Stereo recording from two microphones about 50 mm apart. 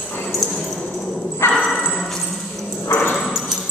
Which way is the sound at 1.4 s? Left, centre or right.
Left.